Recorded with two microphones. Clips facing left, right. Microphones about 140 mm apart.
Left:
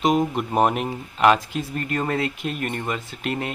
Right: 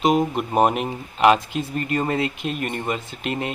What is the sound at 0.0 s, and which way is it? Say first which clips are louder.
Speech: right 1 dB; 5° right (ahead or behind).